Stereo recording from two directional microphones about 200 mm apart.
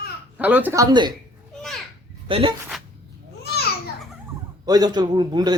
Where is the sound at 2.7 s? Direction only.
Centre (ahead or behind).